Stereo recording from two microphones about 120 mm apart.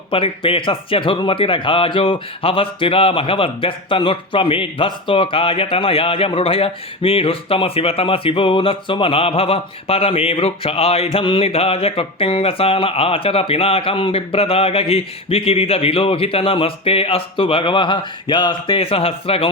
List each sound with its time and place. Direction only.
0.1 s speech: 50° left (ahead or behind)